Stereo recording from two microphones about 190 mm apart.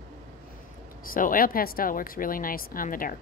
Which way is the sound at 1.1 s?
45° left (ahead or behind).